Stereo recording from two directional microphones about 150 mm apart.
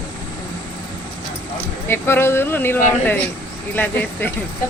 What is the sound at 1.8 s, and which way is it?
Speech, 15° left (ahead or behind).